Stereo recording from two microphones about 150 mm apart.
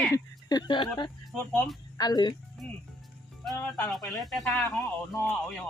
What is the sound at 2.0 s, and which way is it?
Speech, 25° left (ahead or behind).